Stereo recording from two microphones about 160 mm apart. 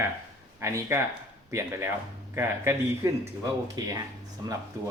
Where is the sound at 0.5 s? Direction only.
15° right (ahead or behind).